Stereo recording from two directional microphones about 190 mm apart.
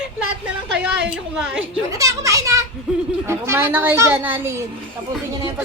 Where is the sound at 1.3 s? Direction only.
5° right (ahead or behind).